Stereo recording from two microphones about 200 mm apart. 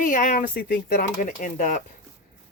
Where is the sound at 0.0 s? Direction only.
40° left (ahead or behind).